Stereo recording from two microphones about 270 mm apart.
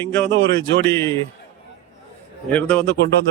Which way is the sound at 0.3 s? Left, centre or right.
Right.